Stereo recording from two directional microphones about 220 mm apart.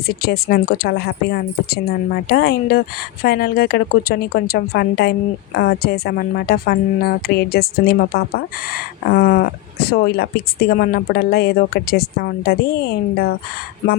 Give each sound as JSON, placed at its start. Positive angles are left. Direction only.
{"t": 0.1, "sound": "a woman's voice", "side_deg": 45}